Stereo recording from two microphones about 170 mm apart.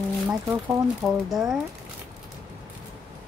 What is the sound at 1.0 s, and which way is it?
Speech, centre (ahead or behind).